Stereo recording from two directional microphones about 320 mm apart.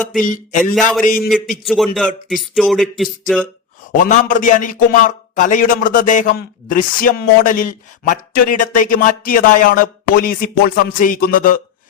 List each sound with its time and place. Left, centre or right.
0.2 s a man's voice: left
0.6 s speech: centre
1.0 s a man's voice: left
1.3 s speech: centre
3.9 s a man's voice: left